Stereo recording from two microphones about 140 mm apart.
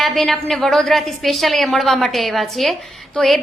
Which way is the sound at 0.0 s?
Centre (ahead or behind).